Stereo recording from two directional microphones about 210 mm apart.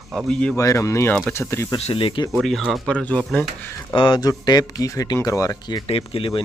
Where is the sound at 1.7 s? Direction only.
25° left (ahead or behind).